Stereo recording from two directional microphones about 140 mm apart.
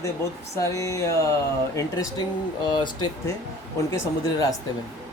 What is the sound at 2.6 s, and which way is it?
A man's voice, 35° left (ahead or behind).